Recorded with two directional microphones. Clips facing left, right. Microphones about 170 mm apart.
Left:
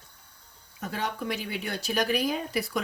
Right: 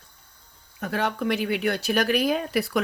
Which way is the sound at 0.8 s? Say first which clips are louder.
Right 6 dB; 65° right (ahead or behind).